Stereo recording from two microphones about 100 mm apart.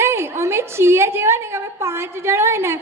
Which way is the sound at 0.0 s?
25° right (ahead or behind).